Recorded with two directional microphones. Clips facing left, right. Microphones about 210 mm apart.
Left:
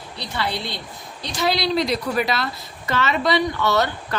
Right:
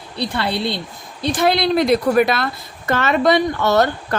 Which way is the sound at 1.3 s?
55° right (ahead or behind).